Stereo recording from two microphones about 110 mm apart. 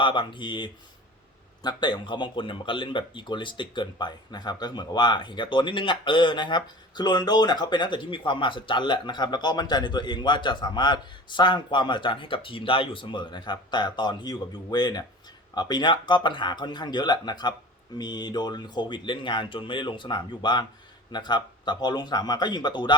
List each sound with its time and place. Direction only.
0.0 s speech: 45° left (ahead or behind)